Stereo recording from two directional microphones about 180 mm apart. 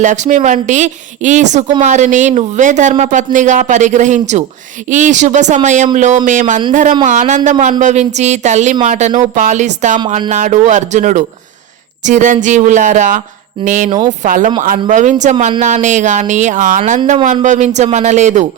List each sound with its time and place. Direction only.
0.0 s speech: 45° right (ahead or behind)